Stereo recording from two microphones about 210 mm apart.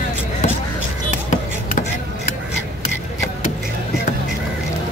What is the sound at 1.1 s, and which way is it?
Basketball bounce, 35° left (ahead or behind).